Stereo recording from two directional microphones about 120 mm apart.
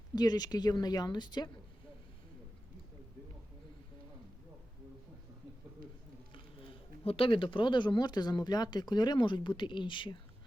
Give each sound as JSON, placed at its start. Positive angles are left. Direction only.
{"t": 0.2, "sound": "speech", "side_deg": 35}
{"t": 6.3, "sound": "speech", "side_deg": 45}